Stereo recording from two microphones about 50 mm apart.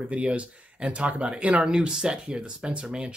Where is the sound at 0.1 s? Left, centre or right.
Right.